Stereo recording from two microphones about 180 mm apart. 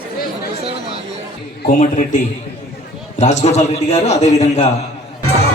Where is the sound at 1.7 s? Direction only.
45° left (ahead or behind).